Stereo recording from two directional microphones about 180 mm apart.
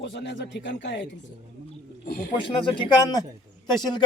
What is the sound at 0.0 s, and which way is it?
Speech, 75° left (ahead or behind).